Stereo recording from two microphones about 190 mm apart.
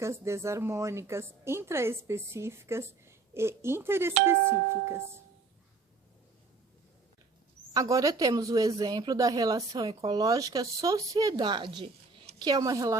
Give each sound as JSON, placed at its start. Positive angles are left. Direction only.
{"t": 0.0, "sound": "a woman's voice", "side_deg": -15}
{"t": 7.7, "sound": "a woman's voice", "side_deg": -20}